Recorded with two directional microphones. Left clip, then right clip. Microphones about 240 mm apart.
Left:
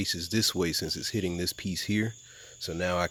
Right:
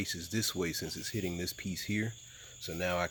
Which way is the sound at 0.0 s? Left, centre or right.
Left.